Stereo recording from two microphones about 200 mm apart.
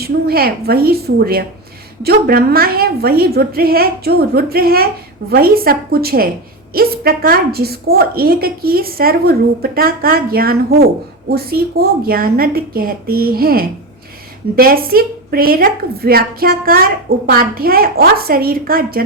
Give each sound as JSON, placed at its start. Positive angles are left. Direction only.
{"t": 0.0, "sound": "a woman's voice", "side_deg": -50}